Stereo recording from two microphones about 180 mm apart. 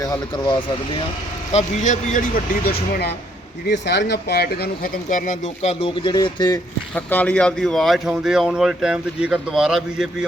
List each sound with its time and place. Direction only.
1.5 s speech: 40° left (ahead or behind); by 3.2 s 60° left (ahead or behind)
3.7 s speech: 70° left (ahead or behind)
5.0 s speech: 45° left (ahead or behind); by 6.6 s 20° left (ahead or behind)
6.9 s speech: 10° left (ahead or behind)